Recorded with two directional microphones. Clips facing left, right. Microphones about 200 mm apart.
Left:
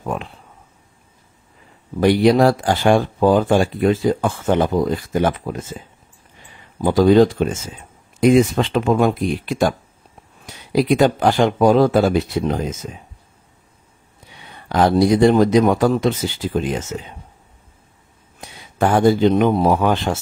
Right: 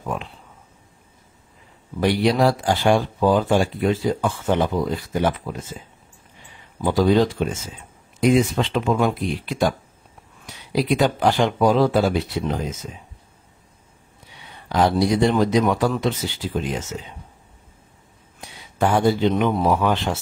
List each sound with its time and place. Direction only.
2.0 s speech: 50° left (ahead or behind)
6.8 s speech: 50° left (ahead or behind)
8.5 s speech: 50° left (ahead or behind)
14.7 s speech: 50° left (ahead or behind)
18.8 s speech: 50° left (ahead or behind)